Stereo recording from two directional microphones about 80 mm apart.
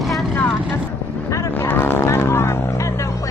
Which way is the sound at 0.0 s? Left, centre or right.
Centre.